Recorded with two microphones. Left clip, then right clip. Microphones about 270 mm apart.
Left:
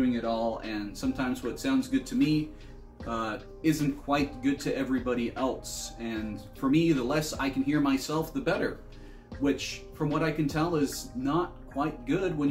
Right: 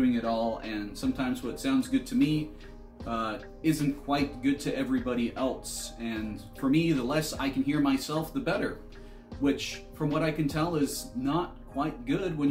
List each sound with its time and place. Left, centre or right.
0.0 s speech: centre